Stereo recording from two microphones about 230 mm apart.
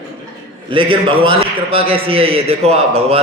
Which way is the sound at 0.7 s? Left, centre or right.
Right.